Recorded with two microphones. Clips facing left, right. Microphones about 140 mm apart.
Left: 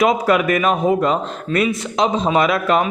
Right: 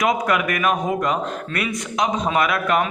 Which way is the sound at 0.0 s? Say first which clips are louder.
Left 5 dB; 25° left (ahead or behind).